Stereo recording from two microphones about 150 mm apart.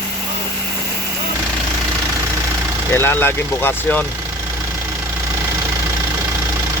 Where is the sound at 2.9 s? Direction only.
15° left (ahead or behind).